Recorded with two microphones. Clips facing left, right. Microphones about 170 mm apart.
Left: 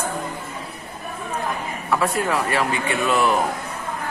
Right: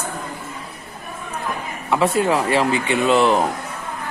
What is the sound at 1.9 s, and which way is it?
Speech, 25° right (ahead or behind).